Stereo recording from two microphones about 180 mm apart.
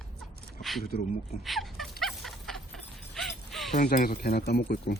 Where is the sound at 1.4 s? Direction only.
Centre (ahead or behind).